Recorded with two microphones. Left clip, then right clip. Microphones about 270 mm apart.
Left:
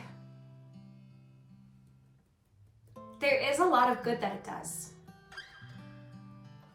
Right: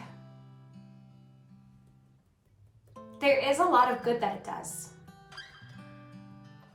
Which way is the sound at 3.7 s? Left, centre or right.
Centre.